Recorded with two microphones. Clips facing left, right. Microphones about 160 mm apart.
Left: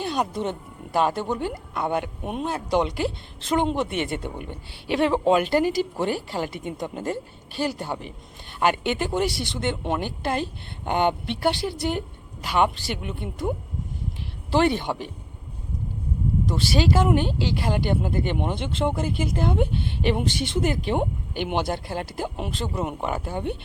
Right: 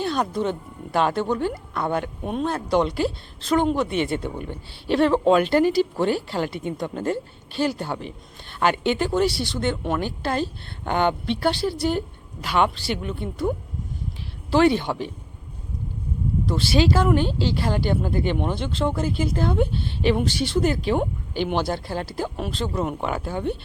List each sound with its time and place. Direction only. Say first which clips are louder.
0.0 s speech: right 2 dB; 15° left (ahead or behind)
4.9 s speech: right 2 dB; 15° left (ahead or behind)
14.5 s speech: right 3 dB; 15° left (ahead or behind)
16.6 s speech: right 4 dB; 45° left (ahead or behind)
16.9 s speech: right 1 dB; 20° left (ahead or behind)